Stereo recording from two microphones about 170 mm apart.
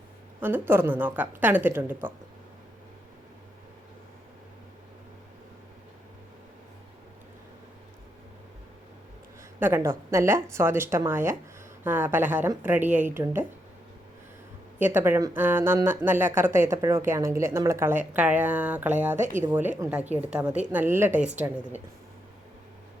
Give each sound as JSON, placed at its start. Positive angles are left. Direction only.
{"t": 0.3, "sound": "speech", "side_deg": -10}
{"t": 9.6, "sound": "speech", "side_deg": -10}
{"t": 14.9, "sound": "speech", "side_deg": -10}